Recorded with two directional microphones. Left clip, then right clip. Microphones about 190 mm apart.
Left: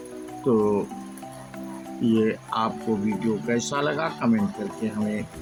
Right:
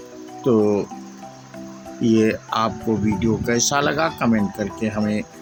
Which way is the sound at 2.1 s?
30° right (ahead or behind).